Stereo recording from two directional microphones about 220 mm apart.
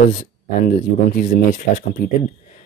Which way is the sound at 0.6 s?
35° left (ahead or behind).